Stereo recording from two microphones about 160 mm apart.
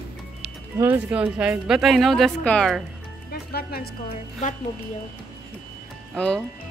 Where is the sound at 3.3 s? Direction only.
75° left (ahead or behind).